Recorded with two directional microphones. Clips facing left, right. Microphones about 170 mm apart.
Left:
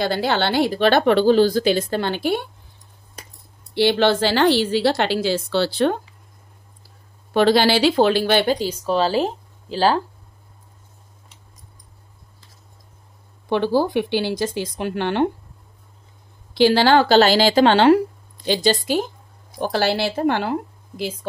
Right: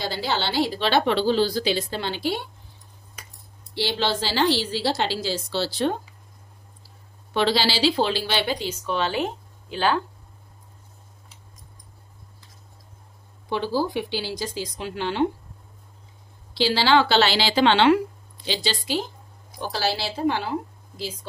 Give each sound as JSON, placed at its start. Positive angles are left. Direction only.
{"t": 0.0, "sound": "a woman's voice", "side_deg": 55}
{"t": 3.7, "sound": "speech", "side_deg": 60}
{"t": 7.3, "sound": "a woman's voice", "side_deg": 50}
{"t": 13.5, "sound": "speech", "side_deg": 60}
{"t": 16.5, "sound": "a woman's voice", "side_deg": 50}